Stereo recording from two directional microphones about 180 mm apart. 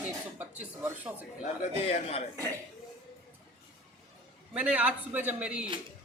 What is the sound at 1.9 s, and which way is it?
Speech, 35° left (ahead or behind).